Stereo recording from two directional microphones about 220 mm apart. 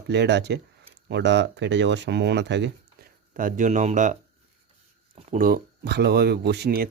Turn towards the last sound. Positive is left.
turn(degrees=-45)  # may be behind; listen again after turning